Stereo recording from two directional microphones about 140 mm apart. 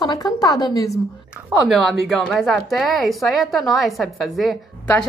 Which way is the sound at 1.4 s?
10° right (ahead or behind).